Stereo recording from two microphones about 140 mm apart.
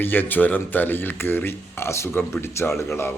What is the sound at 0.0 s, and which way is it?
A man's voice, 15° left (ahead or behind).